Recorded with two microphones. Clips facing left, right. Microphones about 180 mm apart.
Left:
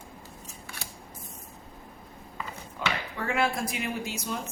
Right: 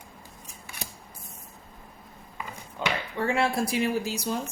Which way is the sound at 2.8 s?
25° right (ahead or behind).